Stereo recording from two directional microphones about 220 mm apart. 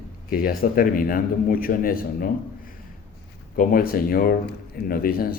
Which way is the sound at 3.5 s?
40° left (ahead or behind).